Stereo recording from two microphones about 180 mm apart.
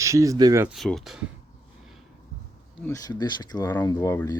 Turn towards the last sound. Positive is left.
turn(degrees=15)  # may be behind; listen again after turning